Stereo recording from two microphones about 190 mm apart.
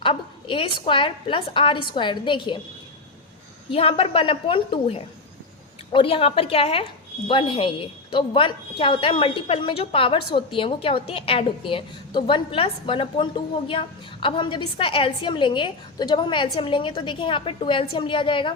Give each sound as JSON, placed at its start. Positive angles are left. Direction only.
{"t": 0.0, "sound": "a woman's voice", "side_deg": 25}
{"t": 3.7, "sound": "a woman's voice", "side_deg": 30}